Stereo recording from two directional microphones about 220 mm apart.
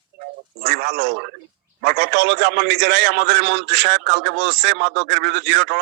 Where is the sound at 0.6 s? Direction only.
45° right (ahead or behind).